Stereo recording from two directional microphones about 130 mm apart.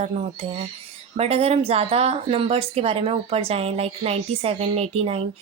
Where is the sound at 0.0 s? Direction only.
50° right (ahead or behind).